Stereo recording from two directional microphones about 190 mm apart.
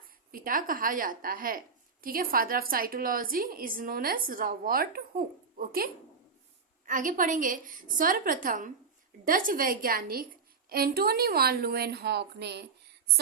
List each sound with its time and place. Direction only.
0.3 s a woman's voice: 50° right (ahead or behind)